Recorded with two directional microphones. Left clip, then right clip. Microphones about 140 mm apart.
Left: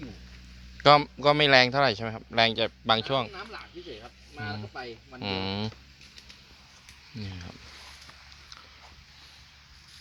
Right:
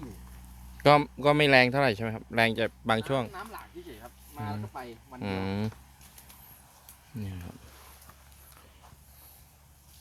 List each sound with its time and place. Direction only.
0.8 s speech: 40° right (ahead or behind)
5.2 s speech: 40° right (ahead or behind)
7.2 s speech: 30° right (ahead or behind)